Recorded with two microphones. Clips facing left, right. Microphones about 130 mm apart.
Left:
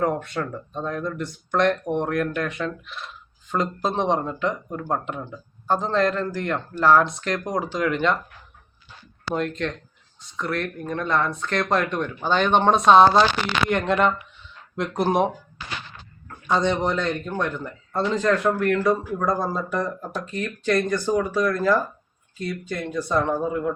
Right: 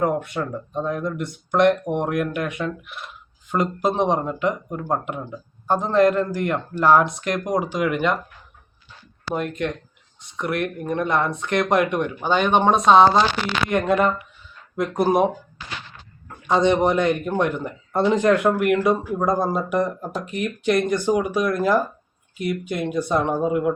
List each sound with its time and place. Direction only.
0.0 s speech: 5° right (ahead or behind)
0.7 s speech: 15° right (ahead or behind)
10.3 s speech: 15° right (ahead or behind)
16.5 s speech: 20° right (ahead or behind)